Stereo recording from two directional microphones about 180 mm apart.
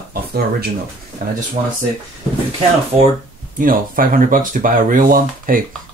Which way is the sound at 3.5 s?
50° right (ahead or behind).